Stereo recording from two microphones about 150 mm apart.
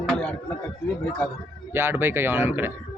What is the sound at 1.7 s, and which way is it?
A man's voice, 15° right (ahead or behind).